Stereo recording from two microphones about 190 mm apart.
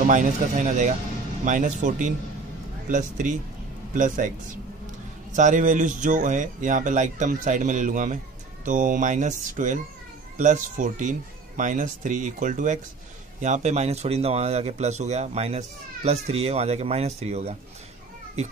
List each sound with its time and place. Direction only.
0.0 s speech: 45° right (ahead or behind)
5.3 s speech: 40° right (ahead or behind)